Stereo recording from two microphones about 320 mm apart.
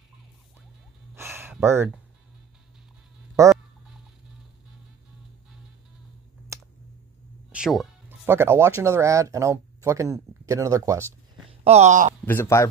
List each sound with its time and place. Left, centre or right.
1.1 s a sound: centre
3.4 s fowl: centre
6.5 s finger snapping: centre
7.5 s speech: centre; by 12.1 s right
12.3 s a man's voice: centre